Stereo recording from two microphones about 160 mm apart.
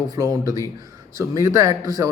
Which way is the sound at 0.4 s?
20° right (ahead or behind).